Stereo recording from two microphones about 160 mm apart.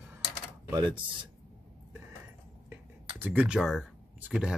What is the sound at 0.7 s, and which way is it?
Speech, 25° right (ahead or behind).